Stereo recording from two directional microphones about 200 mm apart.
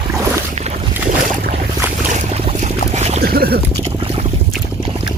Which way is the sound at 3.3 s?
50° right (ahead or behind).